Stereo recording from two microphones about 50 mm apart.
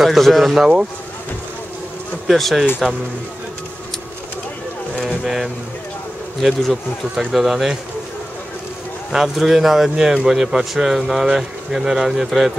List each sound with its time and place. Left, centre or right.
0.0 s speech: centre
0.6 s speech: centre
2.2 s speech: centre
5.0 s speech: centre
9.1 s speech: centre